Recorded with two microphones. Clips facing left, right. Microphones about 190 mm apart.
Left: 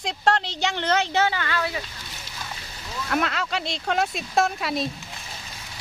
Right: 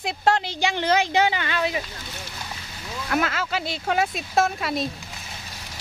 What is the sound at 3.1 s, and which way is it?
Speech, centre (ahead or behind).